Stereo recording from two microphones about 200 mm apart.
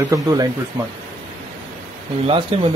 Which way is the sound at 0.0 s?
15° right (ahead or behind).